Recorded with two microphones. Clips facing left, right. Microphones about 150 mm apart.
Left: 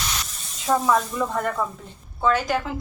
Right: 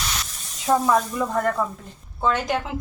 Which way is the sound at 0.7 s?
5° right (ahead or behind).